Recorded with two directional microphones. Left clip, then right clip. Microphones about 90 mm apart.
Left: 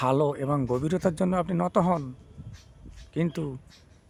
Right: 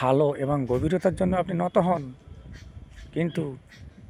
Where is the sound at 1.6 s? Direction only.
20° left (ahead or behind).